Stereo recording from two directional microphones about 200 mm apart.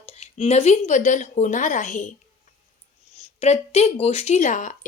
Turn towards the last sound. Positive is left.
turn(degrees=40)  # may be behind; listen again after turning